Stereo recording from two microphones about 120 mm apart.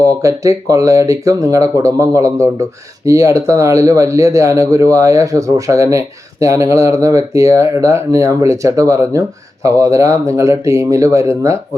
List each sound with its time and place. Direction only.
0.0 s speech: 25° right (ahead or behind)